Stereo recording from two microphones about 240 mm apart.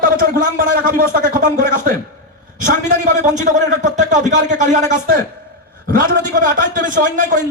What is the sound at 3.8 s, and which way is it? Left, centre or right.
Speech, right.